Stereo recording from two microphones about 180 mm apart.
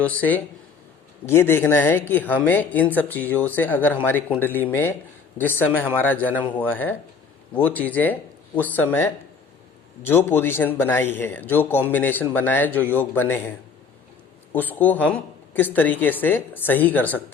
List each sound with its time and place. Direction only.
0.0 s a woman's voice: 10° left (ahead or behind)
14.5 s a woman's voice: 10° left (ahead or behind)